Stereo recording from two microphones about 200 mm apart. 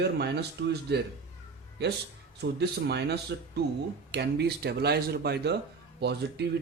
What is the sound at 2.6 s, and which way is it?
Speech, 55° right (ahead or behind).